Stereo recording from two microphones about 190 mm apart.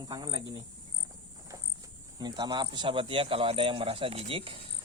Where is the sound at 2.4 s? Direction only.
25° right (ahead or behind).